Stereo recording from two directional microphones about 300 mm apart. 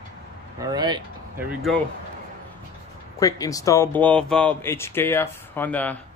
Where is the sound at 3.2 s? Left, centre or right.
Centre.